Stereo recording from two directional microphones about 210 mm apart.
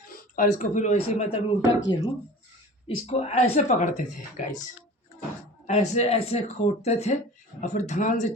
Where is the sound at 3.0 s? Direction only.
30° left (ahead or behind).